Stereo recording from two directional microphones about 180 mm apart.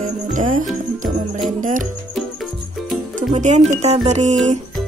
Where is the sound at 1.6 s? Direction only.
45° right (ahead or behind).